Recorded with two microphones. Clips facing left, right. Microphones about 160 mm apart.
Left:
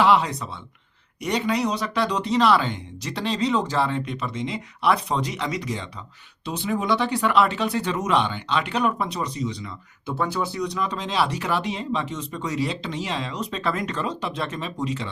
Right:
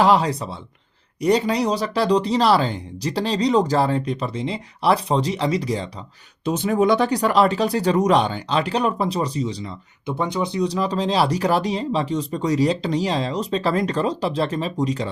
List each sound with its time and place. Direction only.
0.0 s speech: 35° right (ahead or behind)
6.4 s speech: 45° right (ahead or behind)
10.1 s speech: 15° right (ahead or behind)
10.7 s speech: 35° right (ahead or behind)